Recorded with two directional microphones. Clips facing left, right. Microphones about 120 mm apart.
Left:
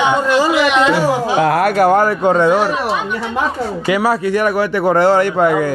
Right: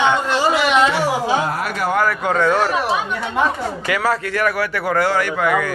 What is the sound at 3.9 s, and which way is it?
Speech, 15° left (ahead or behind).